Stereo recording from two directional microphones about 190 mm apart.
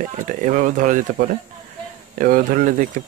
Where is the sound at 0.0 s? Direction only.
40° right (ahead or behind).